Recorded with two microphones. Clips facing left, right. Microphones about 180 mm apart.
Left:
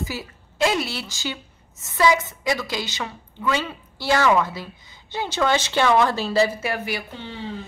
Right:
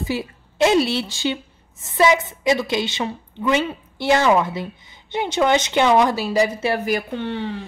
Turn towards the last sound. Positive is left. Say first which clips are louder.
# right 8 dB
turn(degrees=-65)  # may be behind; listen again after turning